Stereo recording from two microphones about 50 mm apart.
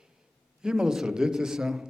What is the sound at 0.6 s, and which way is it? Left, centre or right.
A man's voice, centre.